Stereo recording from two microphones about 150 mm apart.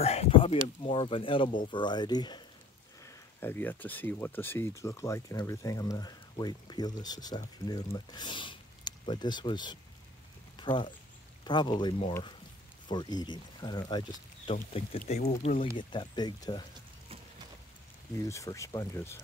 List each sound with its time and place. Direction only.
0.0 s a sound: 45° left (ahead or behind)
0.8 s speech: 35° left (ahead or behind)
3.0 s speech: 20° left (ahead or behind)
10.5 s a sound: 30° left (ahead or behind)
11.4 s speech: 30° left (ahead or behind)
15.0 s speech: 45° left (ahead or behind)
15.8 s speech: 30° left (ahead or behind)
18.1 s speech: 20° left (ahead or behind)